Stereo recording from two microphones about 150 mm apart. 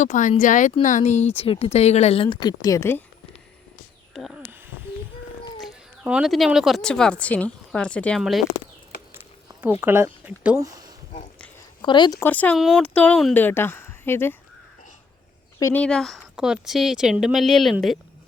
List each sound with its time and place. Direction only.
0.0 s speech: 55° left (ahead or behind)
1.4 s speech: 40° left (ahead or behind); by 3.0 s 20° left (ahead or behind)
4.1 s speech: centre (ahead or behind)
5.5 s speech: centre (ahead or behind)
9.1 s a sound: 15° right (ahead or behind)
9.8 s speech: 15° right (ahead or behind)
10.6 s speech: 25° right (ahead or behind)
11.8 s speech: 30° left (ahead or behind)
12.2 s speech: 10° left (ahead or behind)
12.5 s speech: centre (ahead or behind)
15.5 s speech: 20° left (ahead or behind)
15.8 s speech: 5° left (ahead or behind)